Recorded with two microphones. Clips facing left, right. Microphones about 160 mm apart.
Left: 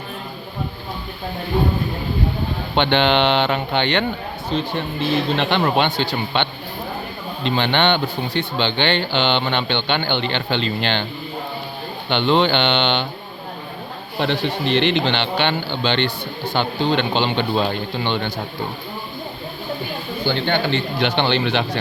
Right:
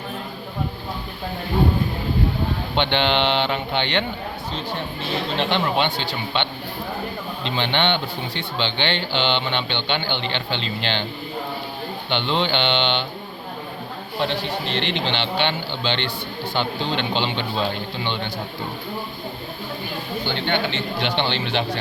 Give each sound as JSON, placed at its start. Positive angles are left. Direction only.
{"t": 2.7, "sound": "speech", "side_deg": 55}
{"t": 5.4, "sound": "speech", "side_deg": 55}
{"t": 12.0, "sound": "speech", "side_deg": 55}
{"t": 14.2, "sound": "speech", "side_deg": 70}
{"t": 20.2, "sound": "speech", "side_deg": 40}
{"t": 21.0, "sound": "speech", "side_deg": 55}